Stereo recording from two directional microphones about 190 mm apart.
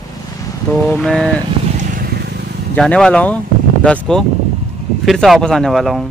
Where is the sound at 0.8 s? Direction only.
5° left (ahead or behind).